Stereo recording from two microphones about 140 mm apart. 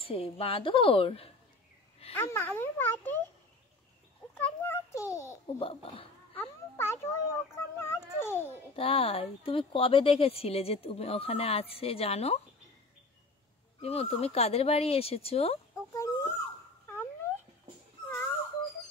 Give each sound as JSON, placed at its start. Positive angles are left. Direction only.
{"t": 0.0, "sound": "a woman's voice", "side_deg": 45}
{"t": 2.1, "sound": "a child's voice", "side_deg": 15}
{"t": 4.4, "sound": "a child's voice", "side_deg": 20}
{"t": 5.6, "sound": "a woman's voice", "side_deg": 40}
{"t": 6.3, "sound": "a child's voice", "side_deg": 15}
{"t": 8.7, "sound": "speech", "side_deg": 40}
{"t": 13.7, "sound": "speech", "side_deg": 45}
{"t": 15.9, "sound": "dog", "side_deg": 20}
{"t": 18.0, "sound": "dog", "side_deg": 10}